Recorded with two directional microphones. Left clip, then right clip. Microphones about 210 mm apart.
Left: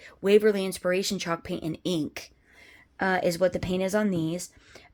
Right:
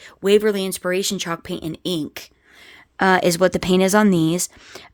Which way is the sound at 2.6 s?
40° right (ahead or behind).